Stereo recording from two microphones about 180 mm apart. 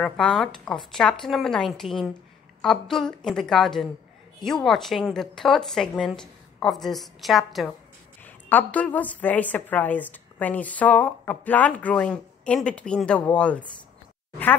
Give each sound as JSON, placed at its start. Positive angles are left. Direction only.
{"t": 0.0, "sound": "a woman's voice", "side_deg": 0}